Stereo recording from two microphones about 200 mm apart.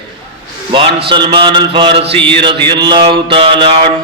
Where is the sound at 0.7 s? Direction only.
25° right (ahead or behind).